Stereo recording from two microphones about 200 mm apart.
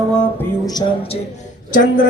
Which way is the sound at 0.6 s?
20° left (ahead or behind).